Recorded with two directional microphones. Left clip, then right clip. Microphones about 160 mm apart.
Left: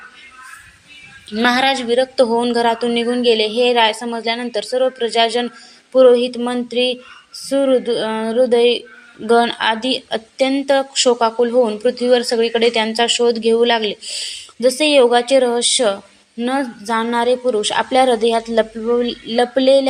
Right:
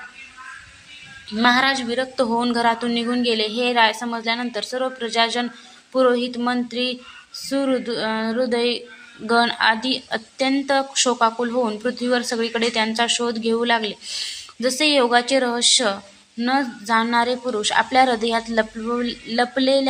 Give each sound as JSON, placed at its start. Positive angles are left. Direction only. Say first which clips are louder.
{"t": 1.4, "sound": "speech", "louder": "left 2 dB", "side_deg": 20}